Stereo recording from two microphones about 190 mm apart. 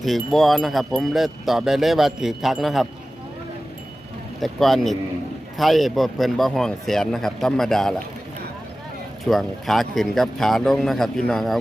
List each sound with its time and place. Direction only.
0.0 s speech: centre (ahead or behind)
4.4 s speech: centre (ahead or behind)
9.2 s speech: centre (ahead or behind)